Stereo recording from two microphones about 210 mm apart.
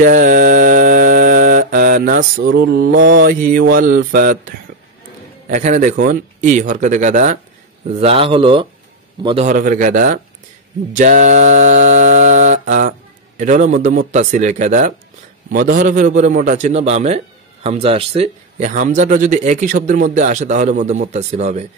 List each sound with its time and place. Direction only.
0.0 s mantra: 40° right (ahead or behind)
2.4 s mantra: 55° right (ahead or behind)
5.5 s speech: 35° right (ahead or behind)